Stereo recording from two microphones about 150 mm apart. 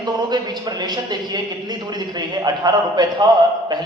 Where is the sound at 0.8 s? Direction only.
30° right (ahead or behind).